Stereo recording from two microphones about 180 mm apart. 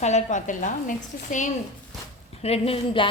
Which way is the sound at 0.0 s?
40° left (ahead or behind).